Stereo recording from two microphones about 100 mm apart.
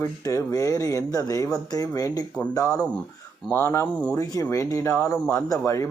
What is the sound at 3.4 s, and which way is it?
Speech, 20° left (ahead or behind).